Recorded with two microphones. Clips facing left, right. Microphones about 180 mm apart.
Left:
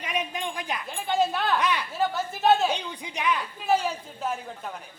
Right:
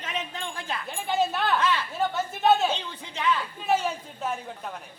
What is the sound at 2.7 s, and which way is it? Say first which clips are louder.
Speech: left 2 dB; 15° left (ahead or behind).